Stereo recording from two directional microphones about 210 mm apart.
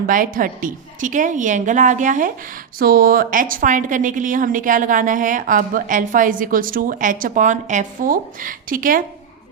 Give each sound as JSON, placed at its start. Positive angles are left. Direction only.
{"t": 0.1, "sound": "a woman's voice", "side_deg": -40}